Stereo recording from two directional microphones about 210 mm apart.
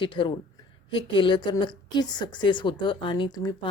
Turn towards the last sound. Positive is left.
turn(degrees=20)  # may be behind; listen again after turning